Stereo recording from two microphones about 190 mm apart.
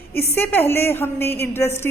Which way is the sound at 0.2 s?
10° left (ahead or behind).